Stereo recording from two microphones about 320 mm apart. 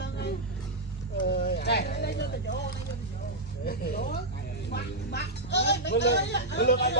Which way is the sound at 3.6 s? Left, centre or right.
Left.